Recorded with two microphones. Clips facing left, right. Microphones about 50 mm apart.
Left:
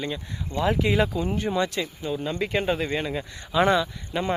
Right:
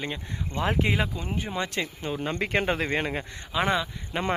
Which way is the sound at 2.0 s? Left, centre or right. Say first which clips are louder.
Left 3 dB; right.